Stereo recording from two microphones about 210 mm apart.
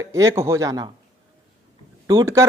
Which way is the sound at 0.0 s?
15° right (ahead or behind).